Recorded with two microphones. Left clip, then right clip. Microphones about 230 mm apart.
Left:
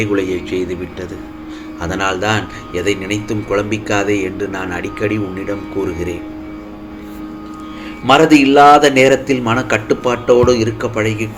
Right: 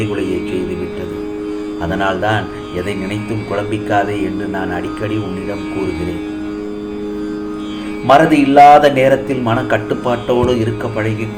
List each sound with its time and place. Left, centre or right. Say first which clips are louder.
1.9 s a man's voice: even; left
8.0 s a man's voice: even; left
10.2 s a man's voice: left 6 dB; left